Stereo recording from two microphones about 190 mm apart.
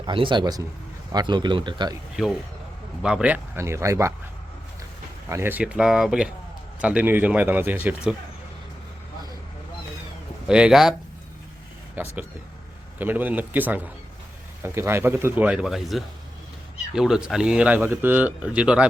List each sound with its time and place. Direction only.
0.0 s speech: 25° right (ahead or behind)
2.2 s speech: 5° right (ahead or behind)
5.3 s speech: 10° right (ahead or behind)
10.4 s speech: 5° right (ahead or behind)
12.0 s speech: 10° right (ahead or behind)